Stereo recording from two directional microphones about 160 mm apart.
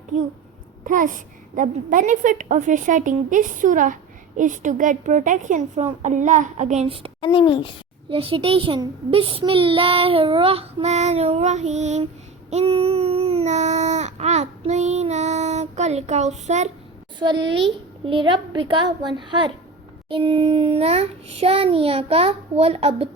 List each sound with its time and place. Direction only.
0.9 s a woman's voice: 55° right (ahead or behind)
6.8 s a child's voice: 35° right (ahead or behind)
7.2 s speech: 30° left (ahead or behind)
8.1 s a child's voice: 35° right (ahead or behind)
12.5 s a sound: 40° right (ahead or behind)
17.2 s a woman's voice: 30° right (ahead or behind)